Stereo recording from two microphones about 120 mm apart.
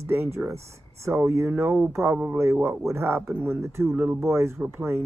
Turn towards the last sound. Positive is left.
turn(degrees=-20)  # may be behind; listen again after turning